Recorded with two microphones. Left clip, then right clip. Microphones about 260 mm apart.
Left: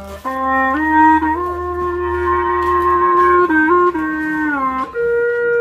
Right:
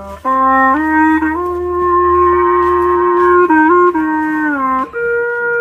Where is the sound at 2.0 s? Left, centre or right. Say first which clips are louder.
Right 5 dB; centre.